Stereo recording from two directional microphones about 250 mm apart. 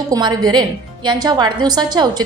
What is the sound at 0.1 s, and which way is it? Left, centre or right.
A woman's voice, centre.